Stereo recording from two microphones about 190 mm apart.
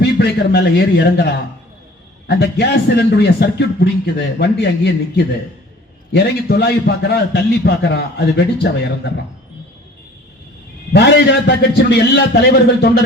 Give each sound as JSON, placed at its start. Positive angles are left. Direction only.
{"t": 0.0, "sound": "a man's voice", "side_deg": 60}
{"t": 10.9, "sound": "a man's voice", "side_deg": 60}